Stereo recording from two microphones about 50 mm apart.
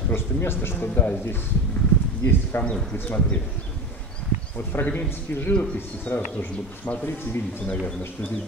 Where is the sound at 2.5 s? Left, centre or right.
Left.